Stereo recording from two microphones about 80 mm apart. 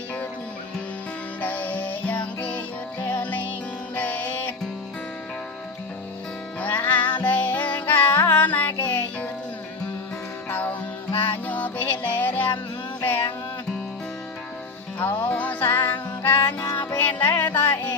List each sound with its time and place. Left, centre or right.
1.4 s music: centre
6.6 s music: left
10.5 s music: left
14.9 s music: left